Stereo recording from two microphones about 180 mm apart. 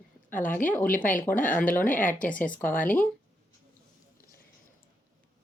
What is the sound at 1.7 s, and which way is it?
Speech, 10° left (ahead or behind).